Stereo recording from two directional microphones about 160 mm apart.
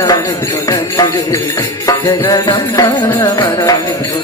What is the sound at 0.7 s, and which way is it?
Jingle bell, 25° left (ahead or behind).